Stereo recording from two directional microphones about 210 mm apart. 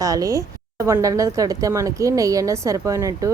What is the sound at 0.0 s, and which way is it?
A woman's voice, 15° right (ahead or behind).